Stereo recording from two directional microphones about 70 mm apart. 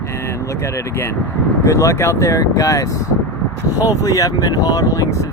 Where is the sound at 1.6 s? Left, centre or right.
Left.